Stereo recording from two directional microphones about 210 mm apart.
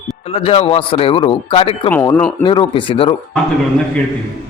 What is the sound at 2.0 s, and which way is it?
Speech, 10° left (ahead or behind).